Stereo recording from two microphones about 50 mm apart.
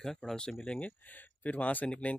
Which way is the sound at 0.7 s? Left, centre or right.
Left.